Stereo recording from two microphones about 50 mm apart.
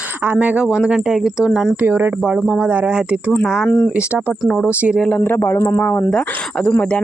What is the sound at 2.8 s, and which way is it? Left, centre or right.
Speech, right.